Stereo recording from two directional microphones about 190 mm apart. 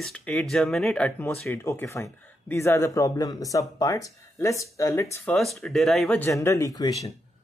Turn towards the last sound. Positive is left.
turn(degrees=20)  # may be behind; listen again after turning